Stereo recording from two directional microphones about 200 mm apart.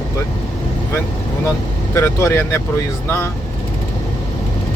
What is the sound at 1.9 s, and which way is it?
Speech, 15° left (ahead or behind).